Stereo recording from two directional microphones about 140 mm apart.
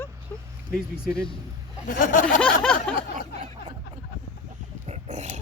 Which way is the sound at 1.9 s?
75° left (ahead or behind).